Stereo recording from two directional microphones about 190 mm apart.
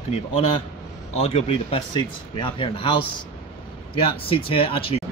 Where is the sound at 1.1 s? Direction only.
35° left (ahead or behind).